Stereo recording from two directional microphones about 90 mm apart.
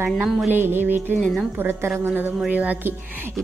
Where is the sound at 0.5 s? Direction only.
25° right (ahead or behind).